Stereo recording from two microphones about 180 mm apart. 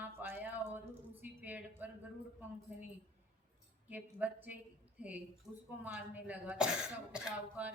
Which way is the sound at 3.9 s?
10° right (ahead or behind).